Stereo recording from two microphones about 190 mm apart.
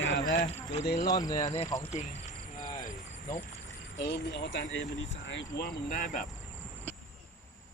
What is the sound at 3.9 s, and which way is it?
Speech, 65° left (ahead or behind).